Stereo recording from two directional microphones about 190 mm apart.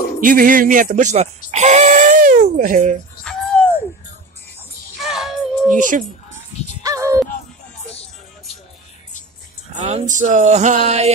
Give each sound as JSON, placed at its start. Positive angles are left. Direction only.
{"t": 0.2, "sound": "speech", "side_deg": -45}
{"t": 3.3, "sound": "a sound", "side_deg": 5}
{"t": 5.0, "sound": "music", "side_deg": 0}
{"t": 5.7, "sound": "speech", "side_deg": -45}
{"t": 6.8, "sound": "music", "side_deg": -15}
{"t": 9.8, "sound": "speech", "side_deg": -35}